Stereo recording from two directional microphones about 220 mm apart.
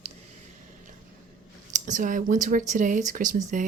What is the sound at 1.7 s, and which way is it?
Speech, 35° right (ahead or behind).